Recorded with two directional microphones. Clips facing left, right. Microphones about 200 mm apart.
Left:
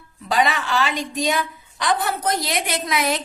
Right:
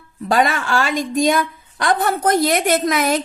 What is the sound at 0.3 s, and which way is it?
A woman's voice, 50° right (ahead or behind).